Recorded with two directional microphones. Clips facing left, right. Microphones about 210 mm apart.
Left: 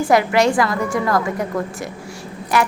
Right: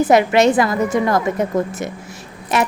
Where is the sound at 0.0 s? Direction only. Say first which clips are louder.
Right 3 dB; 20° right (ahead or behind).